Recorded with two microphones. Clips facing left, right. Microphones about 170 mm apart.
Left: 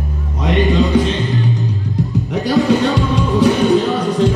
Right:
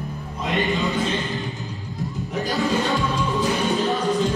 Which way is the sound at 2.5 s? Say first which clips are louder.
Left 9 dB; 70° left (ahead or behind).